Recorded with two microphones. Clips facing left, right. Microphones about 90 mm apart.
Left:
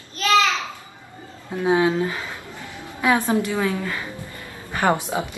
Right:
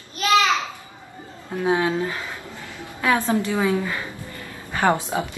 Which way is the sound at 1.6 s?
10° left (ahead or behind).